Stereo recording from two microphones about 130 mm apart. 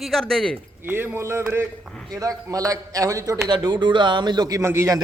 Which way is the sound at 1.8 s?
5° left (ahead or behind).